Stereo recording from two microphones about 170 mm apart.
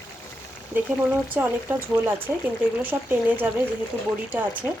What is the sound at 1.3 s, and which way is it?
Speech, 10° right (ahead or behind).